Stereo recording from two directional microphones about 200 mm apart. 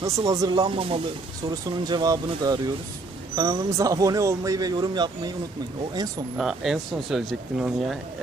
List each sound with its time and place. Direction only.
0.0 s speech: 15° right (ahead or behind)
6.3 s speech: centre (ahead or behind)